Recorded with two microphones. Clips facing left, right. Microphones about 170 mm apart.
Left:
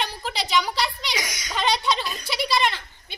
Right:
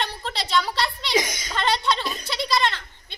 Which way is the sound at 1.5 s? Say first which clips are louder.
Even; 5° left (ahead or behind).